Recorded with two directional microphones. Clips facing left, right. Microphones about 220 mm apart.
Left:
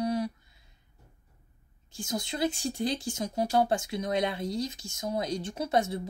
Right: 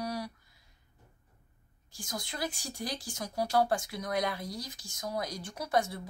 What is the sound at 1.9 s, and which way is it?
Speech, 25° left (ahead or behind).